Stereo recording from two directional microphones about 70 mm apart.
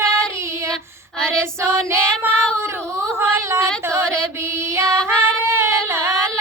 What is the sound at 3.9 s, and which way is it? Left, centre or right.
Mantra, right.